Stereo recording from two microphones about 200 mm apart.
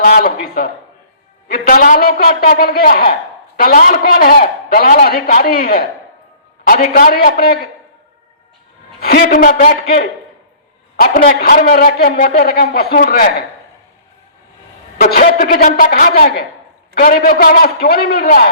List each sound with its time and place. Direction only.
0.0 s a man's voice: 45° left (ahead or behind)
9.0 s a man's voice: 50° left (ahead or behind)
14.9 s a man's voice: 50° left (ahead or behind)